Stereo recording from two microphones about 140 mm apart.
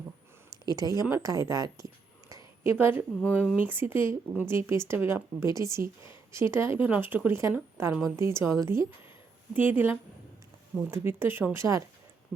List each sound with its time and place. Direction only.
0.7 s a woman's voice: 25° right (ahead or behind)
2.3 s a sound: 15° right (ahead or behind)
3.2 s speech: 10° left (ahead or behind)
3.7 s a woman's voice: 15° right (ahead or behind)
6.0 s a sound: 20° right (ahead or behind)
6.5 s a woman's voice: 20° right (ahead or behind)
9.6 s speech: 15° right (ahead or behind)